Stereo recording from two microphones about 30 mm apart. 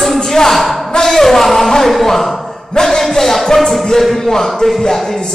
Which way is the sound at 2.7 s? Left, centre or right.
Left.